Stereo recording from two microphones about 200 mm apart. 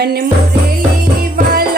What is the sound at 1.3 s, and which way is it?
Music, 50° right (ahead or behind).